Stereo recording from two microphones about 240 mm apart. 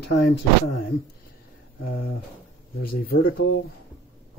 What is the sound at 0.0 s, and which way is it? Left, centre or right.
Speech, left.